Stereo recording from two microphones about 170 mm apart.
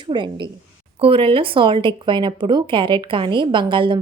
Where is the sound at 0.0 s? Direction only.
25° right (ahead or behind).